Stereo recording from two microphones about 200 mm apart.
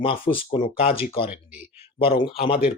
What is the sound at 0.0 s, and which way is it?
Speech, 25° left (ahead or behind).